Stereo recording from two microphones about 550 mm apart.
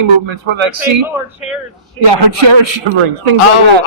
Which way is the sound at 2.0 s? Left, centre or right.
Right.